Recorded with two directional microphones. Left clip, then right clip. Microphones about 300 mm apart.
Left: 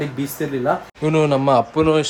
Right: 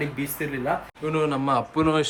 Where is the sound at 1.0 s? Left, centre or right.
Centre.